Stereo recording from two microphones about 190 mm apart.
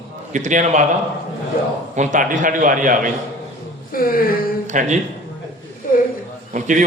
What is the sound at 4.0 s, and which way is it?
Speech, 50° left (ahead or behind).